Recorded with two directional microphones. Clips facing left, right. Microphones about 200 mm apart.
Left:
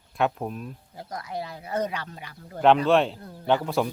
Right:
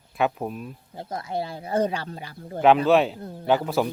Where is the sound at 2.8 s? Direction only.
5° right (ahead or behind).